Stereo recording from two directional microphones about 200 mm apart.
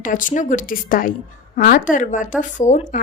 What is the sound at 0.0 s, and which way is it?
A woman's voice, 40° left (ahead or behind).